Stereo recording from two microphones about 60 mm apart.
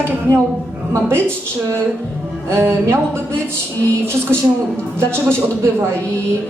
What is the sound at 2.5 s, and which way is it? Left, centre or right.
Speech, right.